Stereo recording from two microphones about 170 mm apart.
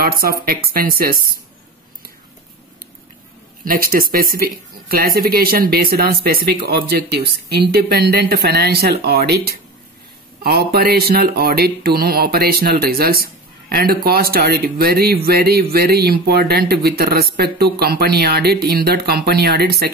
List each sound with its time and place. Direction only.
0.0 s speech: 60° right (ahead or behind)
3.6 s speech: 55° right (ahead or behind)